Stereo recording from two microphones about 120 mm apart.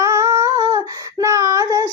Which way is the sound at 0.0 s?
30° right (ahead or behind).